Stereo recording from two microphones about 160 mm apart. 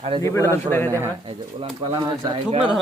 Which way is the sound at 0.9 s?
15° right (ahead or behind).